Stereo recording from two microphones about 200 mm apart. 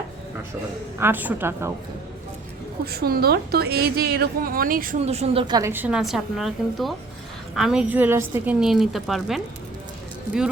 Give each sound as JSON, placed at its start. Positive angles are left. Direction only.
{"t": 0.9, "sound": "a woman's voice", "side_deg": -10}
{"t": 2.8, "sound": "a woman's voice", "side_deg": -50}
{"t": 4.9, "sound": "a woman's voice", "side_deg": -30}